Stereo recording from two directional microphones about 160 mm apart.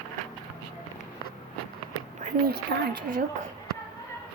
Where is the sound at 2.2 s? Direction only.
75° right (ahead or behind).